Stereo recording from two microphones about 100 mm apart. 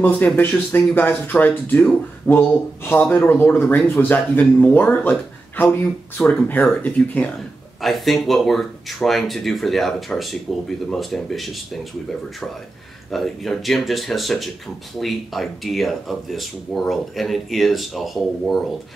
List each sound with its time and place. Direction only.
0.0 s speech: 20° left (ahead or behind)
7.8 s speech: centre (ahead or behind)
13.1 s speech: centre (ahead or behind)